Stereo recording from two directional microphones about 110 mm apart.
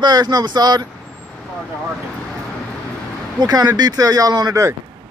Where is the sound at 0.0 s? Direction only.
40° right (ahead or behind).